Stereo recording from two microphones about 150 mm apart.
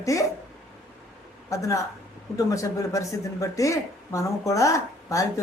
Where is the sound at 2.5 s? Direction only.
20° left (ahead or behind).